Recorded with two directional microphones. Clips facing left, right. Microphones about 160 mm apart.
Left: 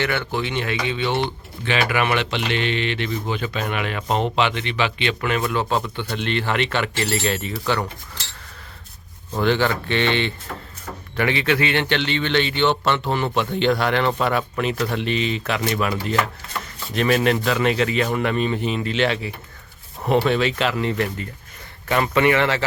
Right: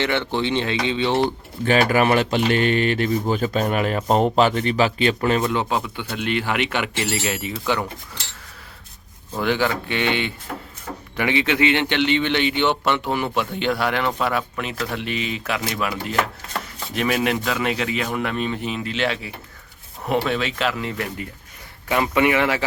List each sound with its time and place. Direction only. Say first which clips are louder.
0.0 s speech: right 2 dB; 25° right (ahead or behind)
5.6 s a man's voice: left 1 dB; 10° right (ahead or behind)
9.4 s a man's voice: left 2 dB; 10° right (ahead or behind)